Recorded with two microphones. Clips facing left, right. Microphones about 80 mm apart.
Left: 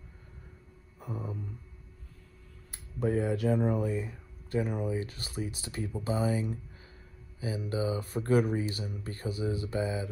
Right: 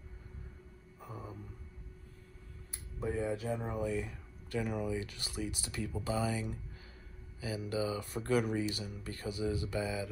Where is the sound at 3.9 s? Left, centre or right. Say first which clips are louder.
Left 2 dB; left.